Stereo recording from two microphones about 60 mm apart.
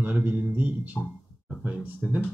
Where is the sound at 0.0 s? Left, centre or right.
Right.